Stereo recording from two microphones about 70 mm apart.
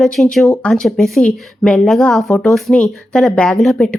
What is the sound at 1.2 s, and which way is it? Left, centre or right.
A woman's voice, centre.